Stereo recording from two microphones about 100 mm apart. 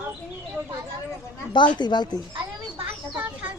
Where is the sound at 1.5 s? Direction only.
50° left (ahead or behind).